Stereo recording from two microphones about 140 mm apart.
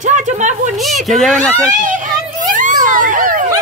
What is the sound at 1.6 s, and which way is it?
A child's voice, 70° right (ahead or behind).